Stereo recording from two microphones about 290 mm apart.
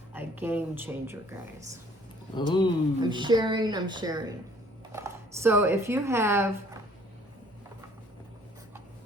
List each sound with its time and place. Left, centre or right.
0.1 s speech: centre
2.3 s speech: centre
3.0 s speech: centre